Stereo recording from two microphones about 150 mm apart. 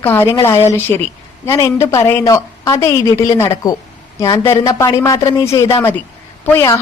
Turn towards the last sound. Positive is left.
turn(degrees=15)  # may be behind; listen again after turning